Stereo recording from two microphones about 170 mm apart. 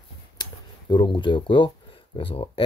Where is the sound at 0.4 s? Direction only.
25° left (ahead or behind).